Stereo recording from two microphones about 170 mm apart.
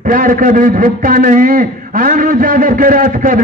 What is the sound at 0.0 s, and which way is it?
A man's voice, 50° right (ahead or behind).